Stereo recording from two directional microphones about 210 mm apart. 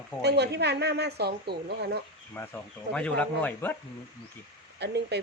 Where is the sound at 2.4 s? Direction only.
10° left (ahead or behind).